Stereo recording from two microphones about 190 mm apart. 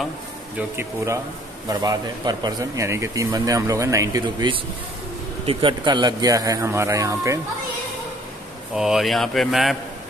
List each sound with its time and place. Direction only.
0.6 s a man's voice: 15° right (ahead or behind)
8.7 s speech: centre (ahead or behind)